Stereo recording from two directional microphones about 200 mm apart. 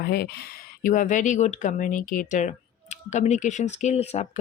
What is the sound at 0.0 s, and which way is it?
Speech, 50° left (ahead or behind).